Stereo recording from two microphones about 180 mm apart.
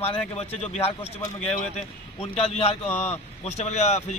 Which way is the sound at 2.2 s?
35° left (ahead or behind).